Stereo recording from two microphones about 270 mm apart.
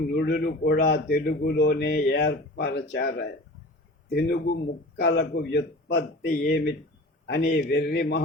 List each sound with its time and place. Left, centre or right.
0.2 s speech: left